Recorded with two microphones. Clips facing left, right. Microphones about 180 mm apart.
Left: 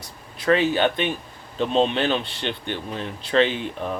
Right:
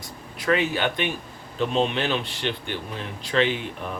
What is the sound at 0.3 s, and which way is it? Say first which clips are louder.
Speech: left 4 dB; 30° left (ahead or behind).